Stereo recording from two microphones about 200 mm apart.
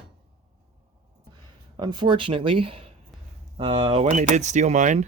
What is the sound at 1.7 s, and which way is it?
Speech, 20° right (ahead or behind).